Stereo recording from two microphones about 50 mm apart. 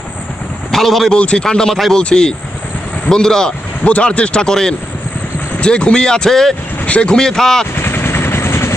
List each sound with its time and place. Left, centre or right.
0.7 s speech: centre
1.1 s speech: centre
1.7 s a man's voice: centre
2.0 s speech: centre
3.8 s speech: left; by 6.5 s centre
6.8 s speech: left
7.8 s vehicle: left